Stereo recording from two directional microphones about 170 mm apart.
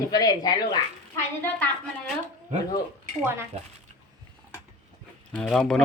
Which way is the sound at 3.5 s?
40° right (ahead or behind).